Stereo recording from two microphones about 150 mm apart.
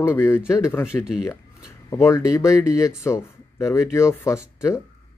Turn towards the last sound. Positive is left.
turn(degrees=20)  # may be behind; listen again after turning